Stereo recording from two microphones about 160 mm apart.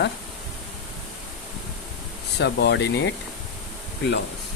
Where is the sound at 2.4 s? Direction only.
90° left.